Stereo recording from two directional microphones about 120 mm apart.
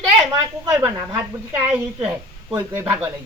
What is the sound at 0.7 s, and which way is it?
A man's voice, 25° right (ahead or behind).